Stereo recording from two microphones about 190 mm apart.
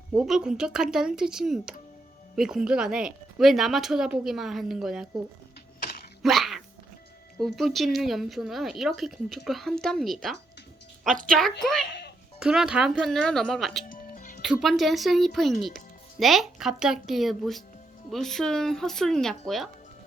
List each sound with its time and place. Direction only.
0.1 s speech: 5° right (ahead or behind)
6.2 s dog: centre (ahead or behind)
7.3 s speech: centre (ahead or behind)
13.8 s music: 45° left (ahead or behind)
14.4 s speech: centre (ahead or behind)